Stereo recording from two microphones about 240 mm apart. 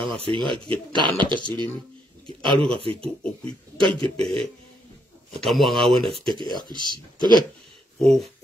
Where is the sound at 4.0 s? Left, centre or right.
Right.